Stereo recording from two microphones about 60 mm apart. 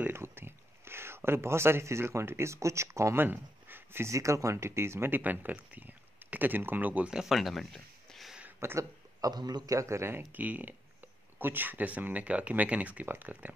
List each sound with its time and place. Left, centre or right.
0.1 s speech: right
3.2 s a sound: right
4.1 s speech: right
5.2 s speech: right
7.1 s speech: centre
8.5 s speech: right
9.2 s speech: right
10.3 s speech: right